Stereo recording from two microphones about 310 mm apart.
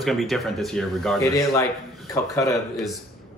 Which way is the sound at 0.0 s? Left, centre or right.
Centre.